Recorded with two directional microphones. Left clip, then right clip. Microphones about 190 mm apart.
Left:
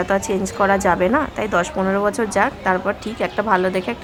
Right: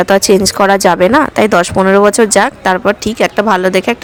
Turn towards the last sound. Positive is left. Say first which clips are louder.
# right 8 dB
turn(degrees=-30)  # may be behind; listen again after turning